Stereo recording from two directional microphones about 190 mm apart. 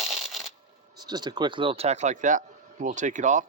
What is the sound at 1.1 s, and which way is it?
Speech, 20° right (ahead or behind).